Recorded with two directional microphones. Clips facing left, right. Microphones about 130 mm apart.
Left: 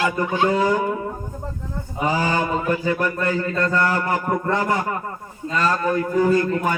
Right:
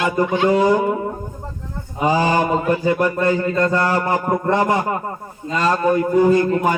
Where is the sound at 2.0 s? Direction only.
20° right (ahead or behind).